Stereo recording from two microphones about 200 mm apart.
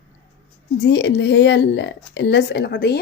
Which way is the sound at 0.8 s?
60° left (ahead or behind).